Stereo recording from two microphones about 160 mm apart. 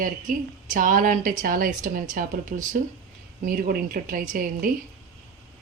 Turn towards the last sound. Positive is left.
turn(degrees=-60)  # may be behind; listen again after turning